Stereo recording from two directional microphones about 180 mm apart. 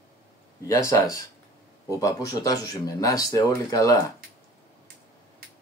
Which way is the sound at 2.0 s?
20° left (ahead or behind).